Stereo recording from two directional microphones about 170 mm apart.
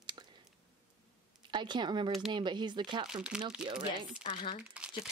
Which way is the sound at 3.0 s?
5° right (ahead or behind).